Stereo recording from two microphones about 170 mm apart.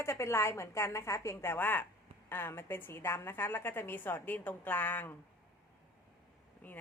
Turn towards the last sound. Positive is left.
turn(degrees=10)  # may be behind; listen again after turning